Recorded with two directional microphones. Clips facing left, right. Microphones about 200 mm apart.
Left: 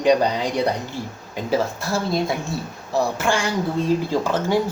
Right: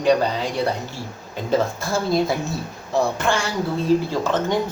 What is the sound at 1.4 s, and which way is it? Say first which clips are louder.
Speech: right 1 dB; 5° left (ahead or behind).